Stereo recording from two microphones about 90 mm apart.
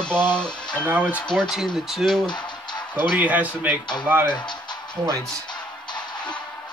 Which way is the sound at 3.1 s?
15° right (ahead or behind).